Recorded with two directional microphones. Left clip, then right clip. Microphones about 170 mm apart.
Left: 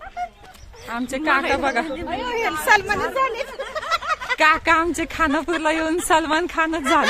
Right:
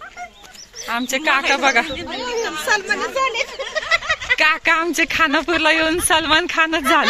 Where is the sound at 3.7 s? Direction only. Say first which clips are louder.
Right 3 dB; 80° left.